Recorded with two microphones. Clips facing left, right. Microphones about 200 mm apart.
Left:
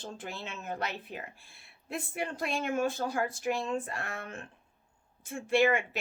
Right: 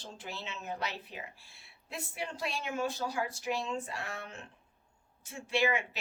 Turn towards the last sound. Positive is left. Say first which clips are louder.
# left 5 dB
turn(degrees=50)  # may be behind; listen again after turning